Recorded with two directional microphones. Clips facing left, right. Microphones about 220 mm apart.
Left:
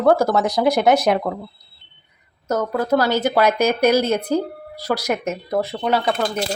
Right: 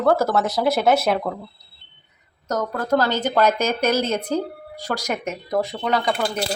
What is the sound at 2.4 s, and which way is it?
A woman's voice, 10° left (ahead or behind).